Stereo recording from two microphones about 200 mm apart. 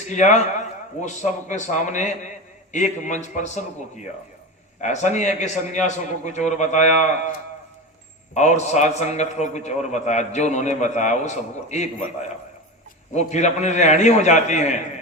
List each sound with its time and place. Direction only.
0.1 s a man's voice: 35° left (ahead or behind)
8.3 s a man's voice: 35° left (ahead or behind)